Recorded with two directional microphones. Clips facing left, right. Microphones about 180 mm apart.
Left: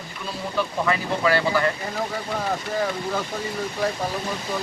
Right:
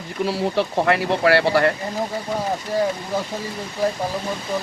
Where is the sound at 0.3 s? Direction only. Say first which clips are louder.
Right 5 dB; 75° right (ahead or behind).